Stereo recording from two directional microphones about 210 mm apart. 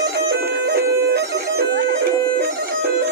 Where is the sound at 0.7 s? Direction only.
50° right (ahead or behind).